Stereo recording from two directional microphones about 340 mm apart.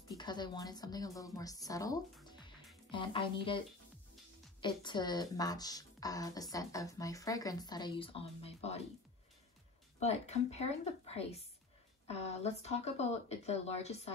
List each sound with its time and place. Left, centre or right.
0.2 s speech: centre
9.9 s speech: centre